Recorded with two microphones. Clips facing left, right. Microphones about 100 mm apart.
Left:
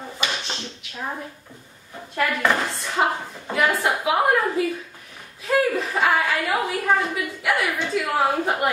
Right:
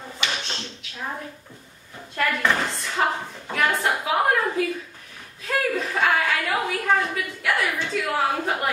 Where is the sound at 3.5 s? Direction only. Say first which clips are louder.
Left 2 dB; 5° left (ahead or behind).